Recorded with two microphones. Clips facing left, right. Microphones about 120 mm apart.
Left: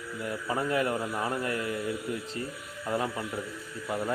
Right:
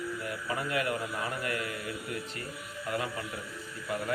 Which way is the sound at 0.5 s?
30° left (ahead or behind).